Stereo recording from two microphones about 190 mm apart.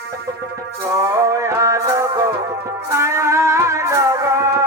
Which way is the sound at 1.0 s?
15° right (ahead or behind).